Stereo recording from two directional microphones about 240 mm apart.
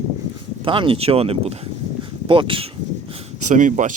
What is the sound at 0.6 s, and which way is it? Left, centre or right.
Speech, right.